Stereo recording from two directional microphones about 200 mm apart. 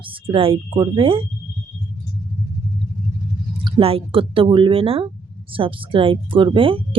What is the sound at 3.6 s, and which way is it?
Speech, 25° right (ahead or behind).